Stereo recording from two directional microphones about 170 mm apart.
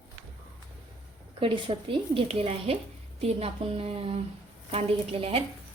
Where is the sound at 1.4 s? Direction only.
30° right (ahead or behind).